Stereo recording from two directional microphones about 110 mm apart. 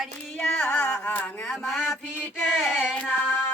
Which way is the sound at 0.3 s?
10° left (ahead or behind).